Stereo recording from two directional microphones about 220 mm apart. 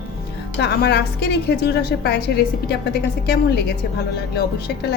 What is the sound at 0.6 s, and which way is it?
A woman's voice, 50° left (ahead or behind).